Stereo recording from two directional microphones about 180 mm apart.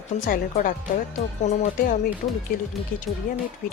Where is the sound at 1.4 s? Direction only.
40° left (ahead or behind).